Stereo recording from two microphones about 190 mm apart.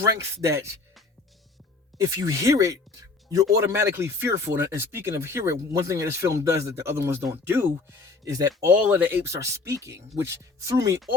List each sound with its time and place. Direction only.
2.0 s speech: 15° right (ahead or behind)